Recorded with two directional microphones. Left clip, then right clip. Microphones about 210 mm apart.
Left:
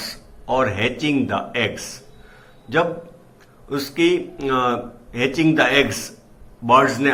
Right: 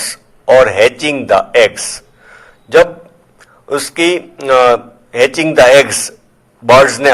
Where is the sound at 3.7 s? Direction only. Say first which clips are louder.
Right 6 dB; 50° right (ahead or behind).